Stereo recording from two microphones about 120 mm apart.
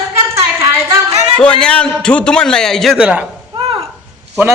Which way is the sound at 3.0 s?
10° right (ahead or behind).